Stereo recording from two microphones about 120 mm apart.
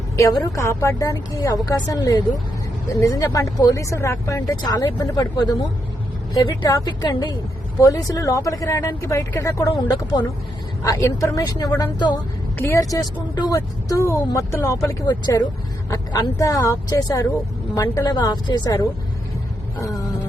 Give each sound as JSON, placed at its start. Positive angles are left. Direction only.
{"t": 0.4, "sound": "a woman's voice", "side_deg": 25}
{"t": 6.7, "sound": "a woman's voice", "side_deg": 35}
{"t": 9.7, "sound": "a woman's voice", "side_deg": 40}
{"t": 10.8, "sound": "speech", "side_deg": 25}
{"t": 12.5, "sound": "a woman's voice", "side_deg": 25}
{"t": 19.8, "sound": "a sound", "side_deg": 30}